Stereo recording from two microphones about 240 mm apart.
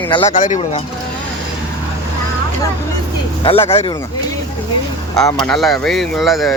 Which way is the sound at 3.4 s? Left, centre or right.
Left.